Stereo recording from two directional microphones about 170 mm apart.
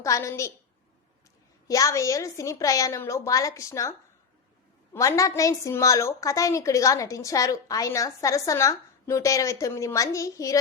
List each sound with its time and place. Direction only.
0.0 s a woman's voice: 20° left (ahead or behind)
1.6 s a woman's voice: 20° left (ahead or behind)
4.9 s a woman's voice: 20° left (ahead or behind)